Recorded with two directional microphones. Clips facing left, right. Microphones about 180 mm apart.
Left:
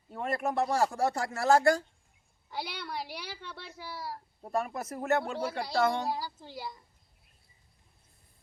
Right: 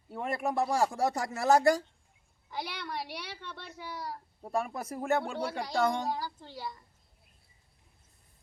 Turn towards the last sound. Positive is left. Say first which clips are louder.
# even
turn(degrees=15)  # may be behind; listen again after turning